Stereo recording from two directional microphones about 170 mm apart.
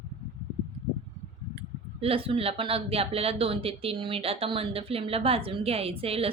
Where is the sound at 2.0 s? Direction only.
35° right (ahead or behind).